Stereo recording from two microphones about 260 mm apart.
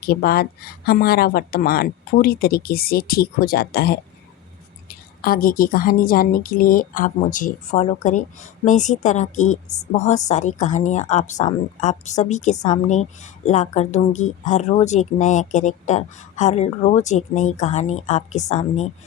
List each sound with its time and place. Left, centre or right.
0.0 s a woman's voice: left